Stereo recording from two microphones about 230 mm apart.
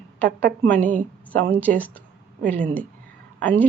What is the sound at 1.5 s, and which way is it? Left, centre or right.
Speech, centre.